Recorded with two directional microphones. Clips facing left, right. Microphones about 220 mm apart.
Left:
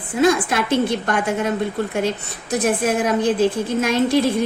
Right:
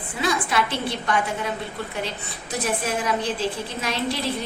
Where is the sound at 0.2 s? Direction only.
45° left (ahead or behind).